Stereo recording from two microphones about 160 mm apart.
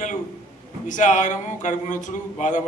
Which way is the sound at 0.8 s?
50° left (ahead or behind).